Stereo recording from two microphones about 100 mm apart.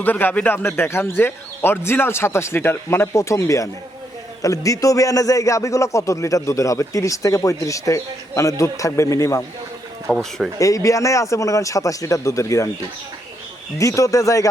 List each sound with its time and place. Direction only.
0.0 s a man's voice: 20° left (ahead or behind)
10.1 s speech: 5° left (ahead or behind)
10.6 s speech: 35° left (ahead or behind)
13.7 s speech: 35° left (ahead or behind)